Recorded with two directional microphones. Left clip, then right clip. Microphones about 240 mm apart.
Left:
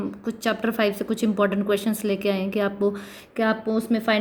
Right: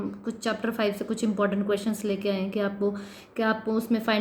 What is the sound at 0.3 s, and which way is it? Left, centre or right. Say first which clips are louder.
A woman's voice: left 5 dB; left.